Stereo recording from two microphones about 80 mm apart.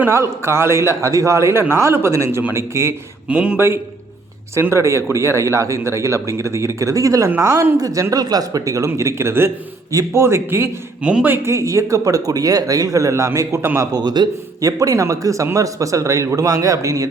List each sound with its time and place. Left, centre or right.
0.1 s a man's voice: right
3.2 s speech: centre
4.7 s a man's voice: right
7.3 s a man's voice: right
7.8 s a man's voice: right
11.0 s speech: centre
11.4 s a man's voice: right
13.9 s a man's voice: right
14.6 s a man's voice: right